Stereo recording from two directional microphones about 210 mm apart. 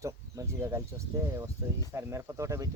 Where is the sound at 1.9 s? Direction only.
15° right (ahead or behind).